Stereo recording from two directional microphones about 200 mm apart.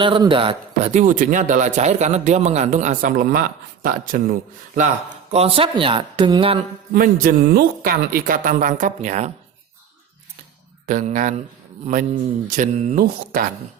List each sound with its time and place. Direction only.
0.0 s speech: 25° right (ahead or behind)
6.9 s speech: 50° right (ahead or behind)
10.8 s speech: 40° right (ahead or behind)
12.5 s speech: 40° right (ahead or behind)